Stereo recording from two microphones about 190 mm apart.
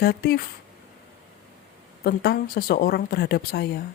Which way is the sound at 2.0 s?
55° left (ahead or behind).